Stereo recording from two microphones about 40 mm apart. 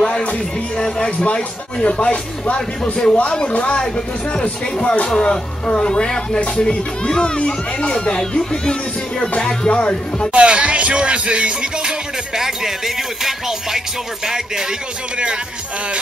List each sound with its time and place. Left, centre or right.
0.0 s music: left
0.8 s speech: centre
1.2 s speech: left
2.5 s speech: left
8.2 s speech: centre
9.2 s speech: left
10.3 s music: right
12.4 s music: centre